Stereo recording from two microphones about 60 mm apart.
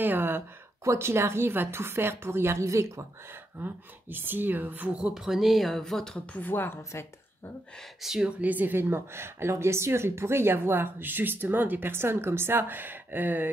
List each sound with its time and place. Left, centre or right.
0.0 s a woman's voice: right
0.8 s a woman's voice: right
3.5 s a woman's voice: right
5.1 s speech: centre
6.2 s a woman's voice: left
6.8 s speech: left
8.0 s speech: centre
8.3 s a woman's voice: right